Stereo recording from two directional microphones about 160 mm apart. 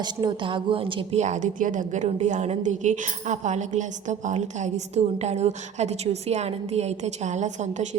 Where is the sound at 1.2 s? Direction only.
50° right (ahead or behind).